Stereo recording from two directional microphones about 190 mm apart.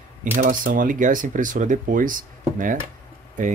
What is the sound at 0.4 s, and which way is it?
Speech, 45° right (ahead or behind).